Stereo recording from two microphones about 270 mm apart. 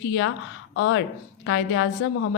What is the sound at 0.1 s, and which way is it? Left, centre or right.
A woman's voice, left.